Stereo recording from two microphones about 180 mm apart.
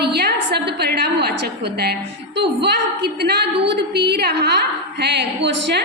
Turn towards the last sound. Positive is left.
turn(degrees=-70)  # may be behind; listen again after turning